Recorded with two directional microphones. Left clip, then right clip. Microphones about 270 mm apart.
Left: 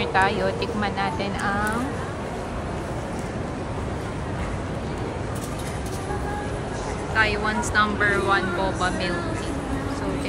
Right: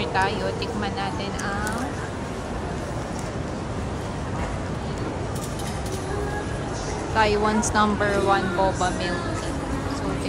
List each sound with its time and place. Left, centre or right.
0.0 s speech: centre
7.2 s speech: centre